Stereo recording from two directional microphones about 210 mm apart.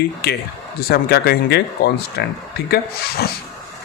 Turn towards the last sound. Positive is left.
turn(degrees=50)  # may be behind; listen again after turning